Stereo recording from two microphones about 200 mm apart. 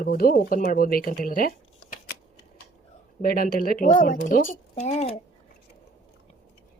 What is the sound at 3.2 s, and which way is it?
Speech, 45° left (ahead or behind).